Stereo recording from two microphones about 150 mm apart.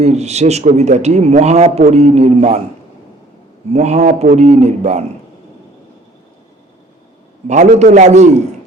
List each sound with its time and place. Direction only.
0.0 s speech: 45° right (ahead or behind)
3.7 s speech: 45° right (ahead or behind)
7.4 s speech: 50° right (ahead or behind)